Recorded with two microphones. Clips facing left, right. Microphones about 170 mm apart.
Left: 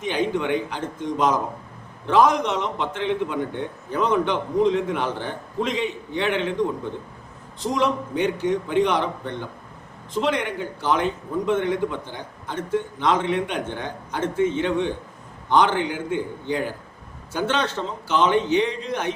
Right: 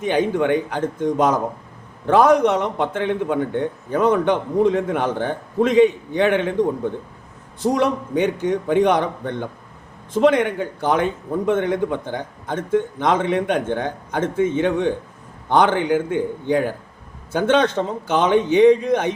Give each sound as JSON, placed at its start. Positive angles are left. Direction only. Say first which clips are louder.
{"t": 0.0, "sound": "a man's voice", "louder": "right 5 dB", "side_deg": -50}
{"t": 8.1, "sound": "a man's voice", "louder": "right 3 dB", "side_deg": -55}